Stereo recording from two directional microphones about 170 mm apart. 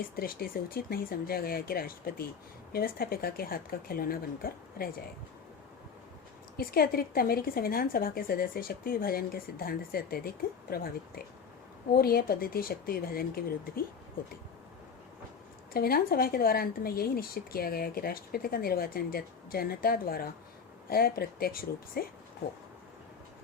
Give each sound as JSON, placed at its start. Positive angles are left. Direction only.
{"t": 0.2, "sound": "a woman's voice", "side_deg": 60}
{"t": 6.6, "sound": "a woman's voice", "side_deg": 60}
{"t": 15.7, "sound": "a woman's voice", "side_deg": 60}